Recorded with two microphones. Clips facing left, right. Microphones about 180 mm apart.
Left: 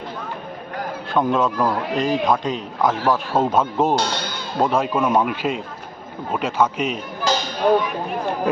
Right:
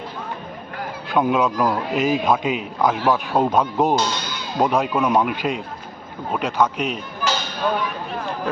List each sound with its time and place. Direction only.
1.1 s a man's voice: 5° right (ahead or behind)
3.9 s speech: 60° left (ahead or behind)
4.5 s a man's voice: centre (ahead or behind)